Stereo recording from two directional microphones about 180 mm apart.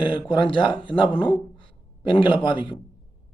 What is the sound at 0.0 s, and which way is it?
Speech, 25° left (ahead or behind).